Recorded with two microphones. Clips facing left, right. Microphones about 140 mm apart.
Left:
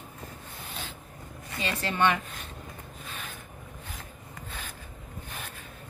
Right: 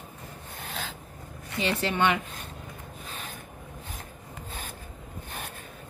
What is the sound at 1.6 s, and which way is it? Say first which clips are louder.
Speech: right 1 dB; 20° right (ahead or behind).